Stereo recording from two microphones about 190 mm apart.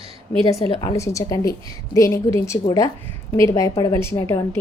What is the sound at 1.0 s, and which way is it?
A woman's voice, 15° left (ahead or behind).